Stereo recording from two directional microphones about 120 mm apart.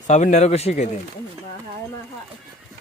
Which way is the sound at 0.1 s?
80° left.